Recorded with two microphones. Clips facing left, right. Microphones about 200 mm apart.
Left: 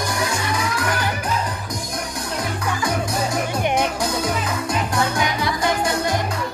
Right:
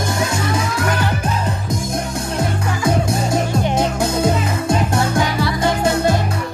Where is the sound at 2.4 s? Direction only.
25° right (ahead or behind).